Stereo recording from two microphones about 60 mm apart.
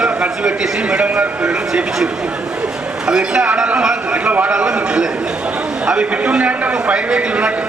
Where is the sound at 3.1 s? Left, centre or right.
Centre.